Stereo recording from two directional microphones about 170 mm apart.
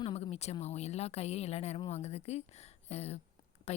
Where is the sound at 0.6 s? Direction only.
40° left (ahead or behind).